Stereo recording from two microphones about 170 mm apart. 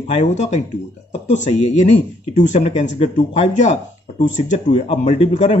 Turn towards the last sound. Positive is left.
turn(degrees=40)  # may be behind; listen again after turning